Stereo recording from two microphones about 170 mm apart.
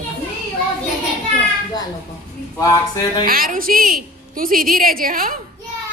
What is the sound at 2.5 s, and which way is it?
Speech, 20° left (ahead or behind).